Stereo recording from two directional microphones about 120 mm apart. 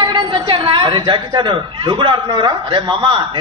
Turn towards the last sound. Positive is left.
turn(degrees=-45)  # may be behind; listen again after turning